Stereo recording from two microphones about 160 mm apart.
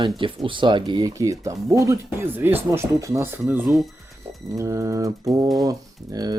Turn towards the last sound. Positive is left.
turn(degrees=-25)  # may be behind; listen again after turning